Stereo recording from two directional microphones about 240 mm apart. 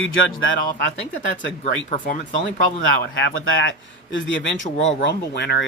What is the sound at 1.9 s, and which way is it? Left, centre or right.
Speech, left.